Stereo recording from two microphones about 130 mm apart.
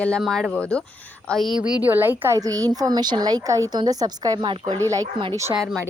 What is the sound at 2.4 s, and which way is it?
A woman's voice, 30° right (ahead or behind).